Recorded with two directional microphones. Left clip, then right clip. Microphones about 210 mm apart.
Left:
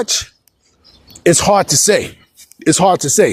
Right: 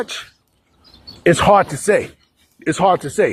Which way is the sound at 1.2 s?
90° left.